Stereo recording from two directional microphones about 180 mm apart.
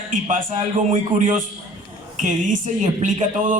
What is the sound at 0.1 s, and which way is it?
Speech, 45° right (ahead or behind).